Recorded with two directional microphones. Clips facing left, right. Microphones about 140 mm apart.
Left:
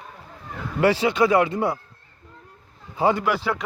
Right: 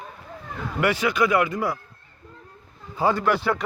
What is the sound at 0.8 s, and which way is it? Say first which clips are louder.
Speech: left 3 dB; 30° left (ahead or behind).